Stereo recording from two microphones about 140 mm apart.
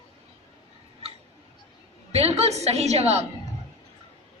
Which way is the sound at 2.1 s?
50° right (ahead or behind).